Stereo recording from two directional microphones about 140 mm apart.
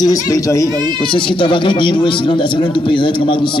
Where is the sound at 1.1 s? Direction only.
35° left (ahead or behind).